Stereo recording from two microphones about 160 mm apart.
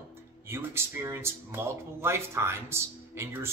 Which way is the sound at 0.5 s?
15° right (ahead or behind).